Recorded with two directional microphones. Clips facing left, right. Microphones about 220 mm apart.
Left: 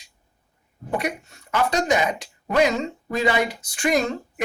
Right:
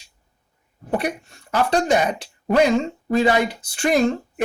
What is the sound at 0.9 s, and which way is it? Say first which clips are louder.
Speech: right 3 dB; 30° right (ahead or behind).